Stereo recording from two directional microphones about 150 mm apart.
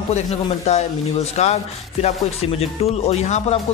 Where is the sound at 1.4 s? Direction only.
45° left (ahead or behind).